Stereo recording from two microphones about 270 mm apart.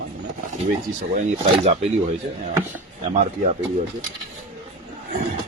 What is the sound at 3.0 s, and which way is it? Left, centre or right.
Speech, right.